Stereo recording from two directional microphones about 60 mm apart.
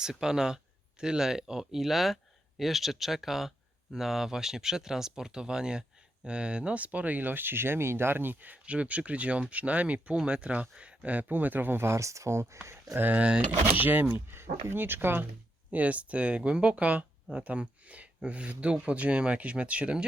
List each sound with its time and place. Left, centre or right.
0.0 s speech: centre; by 13.0 s right
13.0 s speech: right
15.7 s speech: right